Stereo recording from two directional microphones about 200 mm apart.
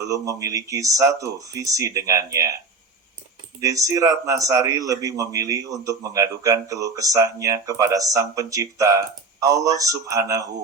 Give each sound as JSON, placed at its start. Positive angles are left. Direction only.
{"t": 0.3, "sound": "speech", "side_deg": -15}
{"t": 3.6, "sound": "speech", "side_deg": -15}